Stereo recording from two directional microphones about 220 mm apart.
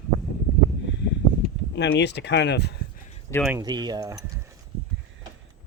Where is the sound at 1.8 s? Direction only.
50° left (ahead or behind).